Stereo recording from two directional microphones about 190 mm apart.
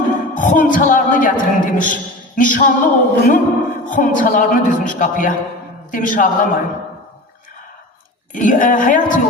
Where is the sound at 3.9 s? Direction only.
45° left (ahead or behind).